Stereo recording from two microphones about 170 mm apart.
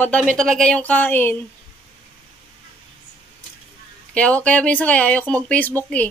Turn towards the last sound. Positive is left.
turn(degrees=10)  # may be behind; listen again after turning